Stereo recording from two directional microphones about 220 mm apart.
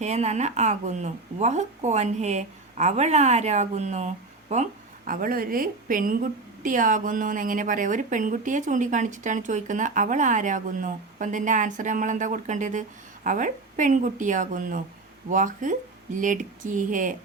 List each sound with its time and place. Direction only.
0.0 s speech: 30° right (ahead or behind)